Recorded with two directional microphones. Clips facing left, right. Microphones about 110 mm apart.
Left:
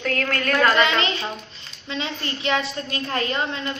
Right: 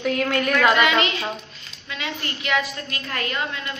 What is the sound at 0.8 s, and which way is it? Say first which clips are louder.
A woman's voice: right 1 dB; 30° left (ahead or behind).